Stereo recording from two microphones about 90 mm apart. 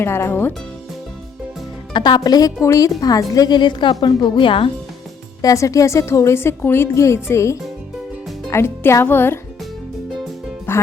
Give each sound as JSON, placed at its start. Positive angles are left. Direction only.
{"t": 0.0, "sound": "speech", "side_deg": 25}
{"t": 1.9, "sound": "a woman's voice", "side_deg": 55}
{"t": 5.4, "sound": "a woman's voice", "side_deg": 40}
{"t": 10.7, "sound": "music", "side_deg": 25}